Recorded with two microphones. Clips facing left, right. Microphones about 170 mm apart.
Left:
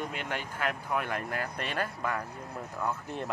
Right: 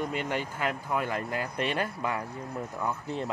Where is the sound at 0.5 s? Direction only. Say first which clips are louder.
Right 2 dB; 5° right (ahead or behind).